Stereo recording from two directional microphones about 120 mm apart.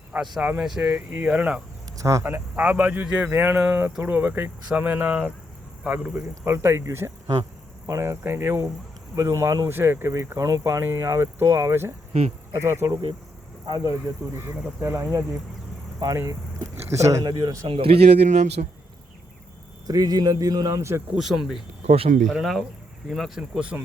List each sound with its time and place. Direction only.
0.4 s speech: 15° right (ahead or behind)
2.0 s speech: 25° right (ahead or behind)
2.2 s speech: 15° right (ahead or behind)
13.7 s a man's voice: 35° right (ahead or behind)
13.9 s speech: 20° right (ahead or behind)
17.7 s speech: 50° right (ahead or behind); by 18.7 s 75° right (ahead or behind)
19.9 s a man's voice: 30° right (ahead or behind)
21.2 s speech: centre (ahead or behind)
21.8 s speech: 55° right (ahead or behind)
22.3 s speech: centre (ahead or behind)
23.4 s speech: 10° right (ahead or behind)